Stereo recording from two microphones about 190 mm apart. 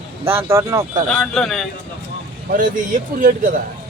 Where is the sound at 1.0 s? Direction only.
5° left (ahead or behind).